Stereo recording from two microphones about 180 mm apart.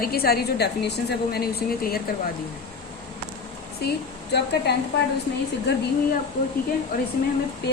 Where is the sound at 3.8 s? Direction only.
65° left (ahead or behind).